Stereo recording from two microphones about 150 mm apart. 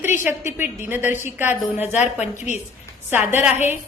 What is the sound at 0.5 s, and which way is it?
A woman's voice, 10° right (ahead or behind).